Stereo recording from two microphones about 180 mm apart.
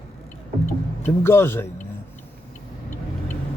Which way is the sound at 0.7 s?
15° left (ahead or behind).